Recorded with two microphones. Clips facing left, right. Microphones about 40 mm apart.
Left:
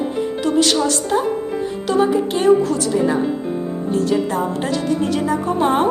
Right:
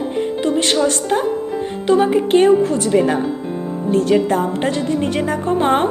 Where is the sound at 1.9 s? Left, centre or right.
Right.